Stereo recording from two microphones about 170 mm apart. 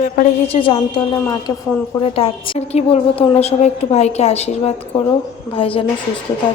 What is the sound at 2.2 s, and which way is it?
A woman's voice, 35° left (ahead or behind).